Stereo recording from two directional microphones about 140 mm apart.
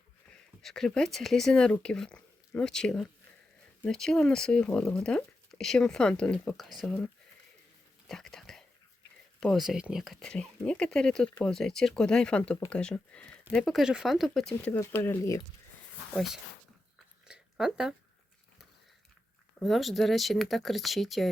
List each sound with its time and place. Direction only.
0.6 s speech: 5° left (ahead or behind)
8.0 s whispering: 5° left (ahead or behind)
9.4 s speech: centre (ahead or behind)
14.7 s speech: 15° left (ahead or behind)
16.1 s speech: centre (ahead or behind)
17.2 s a sound: 5° right (ahead or behind)
19.5 s speech: centre (ahead or behind)